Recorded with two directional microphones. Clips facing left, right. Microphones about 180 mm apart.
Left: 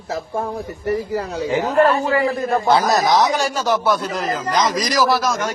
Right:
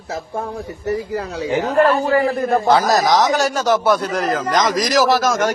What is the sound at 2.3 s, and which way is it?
A man's voice, 55° right (ahead or behind).